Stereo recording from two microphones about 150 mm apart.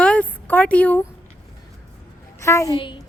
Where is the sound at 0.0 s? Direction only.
10° left (ahead or behind).